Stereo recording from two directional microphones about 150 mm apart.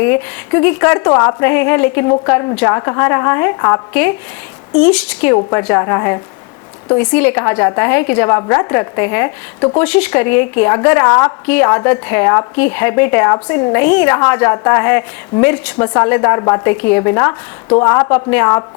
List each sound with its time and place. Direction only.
0.0 s a woman's voice: 15° left (ahead or behind)
4.8 s a woman's voice: 5° left (ahead or behind)
5.3 s a woman's voice: 20° left (ahead or behind)